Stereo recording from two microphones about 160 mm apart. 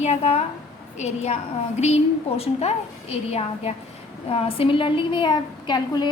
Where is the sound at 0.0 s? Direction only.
40° left (ahead or behind).